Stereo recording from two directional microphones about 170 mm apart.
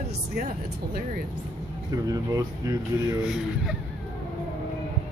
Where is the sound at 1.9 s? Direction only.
20° right (ahead or behind).